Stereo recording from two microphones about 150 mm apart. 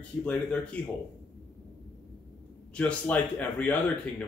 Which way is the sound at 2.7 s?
10° left (ahead or behind).